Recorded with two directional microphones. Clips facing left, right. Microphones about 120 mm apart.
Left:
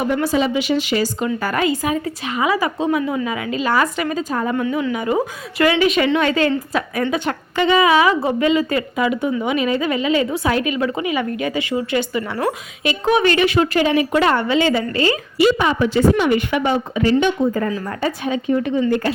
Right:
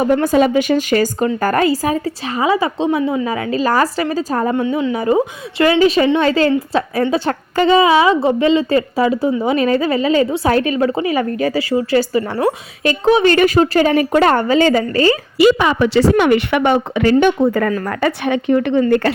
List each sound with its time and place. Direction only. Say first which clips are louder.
0.0 s a woman's voice: right 5 dB; 45° right (ahead or behind)
13.2 s a woman's voice: right 4 dB; 40° right (ahead or behind)
15.5 s speech: right 3 dB; 85° right
17.2 s speech: right 6 dB; 50° right (ahead or behind)
17.5 s speech: right 4 dB; 65° right (ahead or behind)